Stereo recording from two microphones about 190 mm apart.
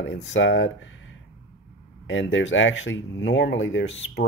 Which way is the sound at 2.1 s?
80° left.